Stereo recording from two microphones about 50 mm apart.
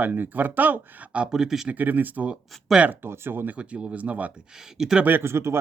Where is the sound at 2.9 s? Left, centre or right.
Right.